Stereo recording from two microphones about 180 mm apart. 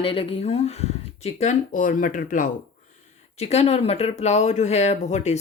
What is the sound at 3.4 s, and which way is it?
Speech, 35° left (ahead or behind).